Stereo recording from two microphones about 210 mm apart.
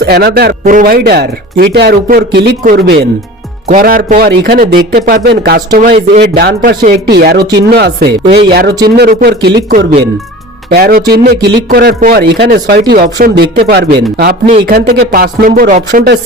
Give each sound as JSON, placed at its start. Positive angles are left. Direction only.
{"t": 0.0, "sound": "speech", "side_deg": -50}
{"t": 9.6, "sound": "speech", "side_deg": -40}